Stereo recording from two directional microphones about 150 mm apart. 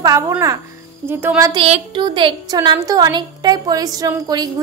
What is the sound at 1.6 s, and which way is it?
Speech, 45° right (ahead or behind).